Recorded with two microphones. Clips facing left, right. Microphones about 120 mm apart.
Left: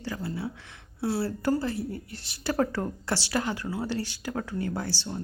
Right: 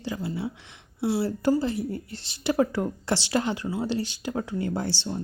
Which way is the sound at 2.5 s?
15° right (ahead or behind).